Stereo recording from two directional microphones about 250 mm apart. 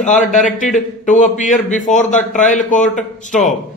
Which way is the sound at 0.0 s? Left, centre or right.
Left.